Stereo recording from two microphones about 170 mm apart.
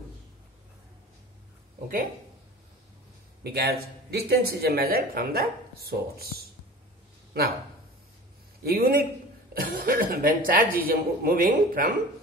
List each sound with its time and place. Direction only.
3.4 s speech: 65° right (ahead or behind)
8.6 s speech: 60° right (ahead or behind)